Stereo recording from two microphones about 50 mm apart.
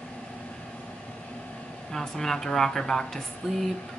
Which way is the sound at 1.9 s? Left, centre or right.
Centre.